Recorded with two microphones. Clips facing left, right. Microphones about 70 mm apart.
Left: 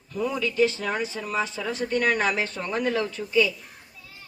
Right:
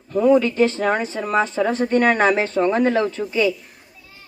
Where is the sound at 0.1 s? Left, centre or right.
Right.